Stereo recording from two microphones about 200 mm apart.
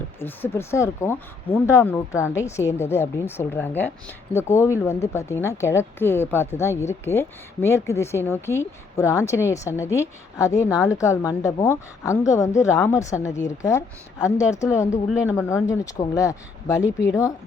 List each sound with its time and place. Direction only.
0.2 s speech: 10° left (ahead or behind)